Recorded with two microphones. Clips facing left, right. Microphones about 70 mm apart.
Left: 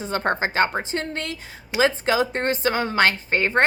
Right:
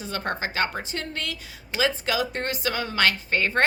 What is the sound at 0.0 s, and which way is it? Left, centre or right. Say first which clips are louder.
A woman's voice: left 6 dB; left.